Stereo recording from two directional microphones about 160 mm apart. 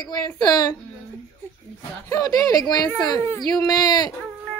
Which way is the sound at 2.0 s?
20° left (ahead or behind).